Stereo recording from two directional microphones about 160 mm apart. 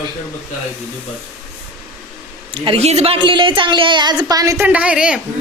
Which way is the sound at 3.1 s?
30° right (ahead or behind).